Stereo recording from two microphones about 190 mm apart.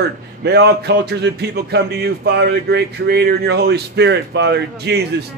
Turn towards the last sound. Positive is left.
turn(degrees=-60)  # may be behind; listen again after turning